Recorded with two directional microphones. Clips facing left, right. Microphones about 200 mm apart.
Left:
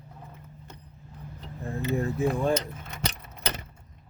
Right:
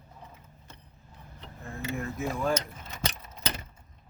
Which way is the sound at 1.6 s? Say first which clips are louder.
Left 6 dB; 35° left (ahead or behind).